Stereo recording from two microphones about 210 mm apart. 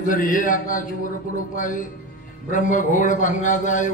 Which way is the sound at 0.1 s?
40° left (ahead or behind).